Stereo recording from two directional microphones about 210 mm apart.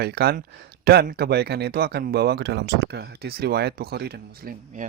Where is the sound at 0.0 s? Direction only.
50° right (ahead or behind).